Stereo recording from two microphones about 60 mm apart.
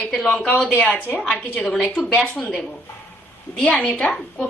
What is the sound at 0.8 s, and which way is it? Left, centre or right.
Speech, left.